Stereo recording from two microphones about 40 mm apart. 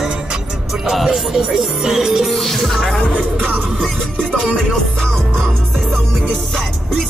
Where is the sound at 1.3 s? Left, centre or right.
Centre.